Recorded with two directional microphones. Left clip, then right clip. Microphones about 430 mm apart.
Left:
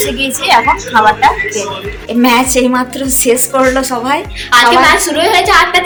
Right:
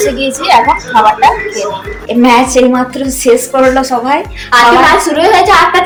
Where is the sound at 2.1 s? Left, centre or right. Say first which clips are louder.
Right 3 dB; left.